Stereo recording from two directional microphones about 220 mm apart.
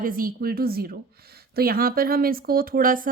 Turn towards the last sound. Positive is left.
turn(degrees=-40)  # may be behind; listen again after turning